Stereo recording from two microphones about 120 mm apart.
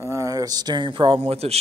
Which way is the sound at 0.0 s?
25° right (ahead or behind).